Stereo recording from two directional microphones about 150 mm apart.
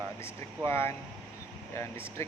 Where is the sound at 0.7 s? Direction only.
15° left (ahead or behind).